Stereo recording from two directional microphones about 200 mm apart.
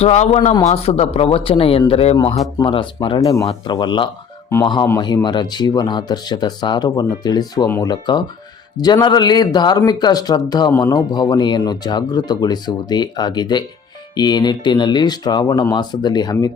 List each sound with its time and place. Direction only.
0.0 s a man's voice: 30° left (ahead or behind)